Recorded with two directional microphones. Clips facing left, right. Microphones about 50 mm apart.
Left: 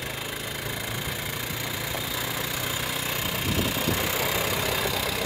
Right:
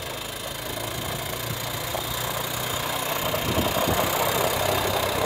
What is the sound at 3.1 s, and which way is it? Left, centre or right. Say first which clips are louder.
Vehicle: right 3 dB; centre.